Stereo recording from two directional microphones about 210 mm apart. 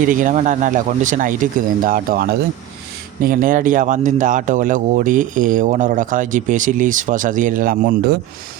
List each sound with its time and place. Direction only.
0.0 s speech: 40° right (ahead or behind)